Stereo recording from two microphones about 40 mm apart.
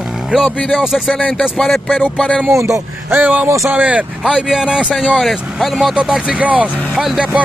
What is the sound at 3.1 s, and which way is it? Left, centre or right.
Speech, right.